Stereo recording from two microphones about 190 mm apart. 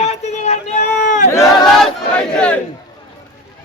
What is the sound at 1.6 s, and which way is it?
Battle cry, 5° left (ahead or behind).